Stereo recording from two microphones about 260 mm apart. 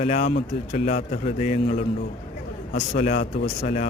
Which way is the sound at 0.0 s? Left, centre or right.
Left.